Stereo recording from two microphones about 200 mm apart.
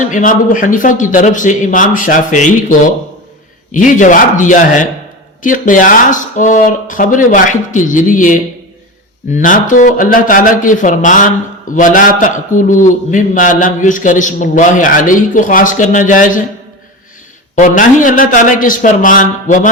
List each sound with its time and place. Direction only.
0.0 s a man's voice: 40° left (ahead or behind)
17.5 s a man's voice: 40° left (ahead or behind)